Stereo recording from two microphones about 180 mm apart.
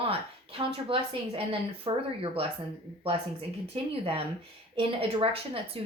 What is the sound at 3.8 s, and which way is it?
Speech, 30° right (ahead or behind).